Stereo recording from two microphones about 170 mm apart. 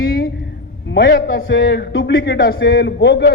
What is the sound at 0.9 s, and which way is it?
A man's voice, 90° left.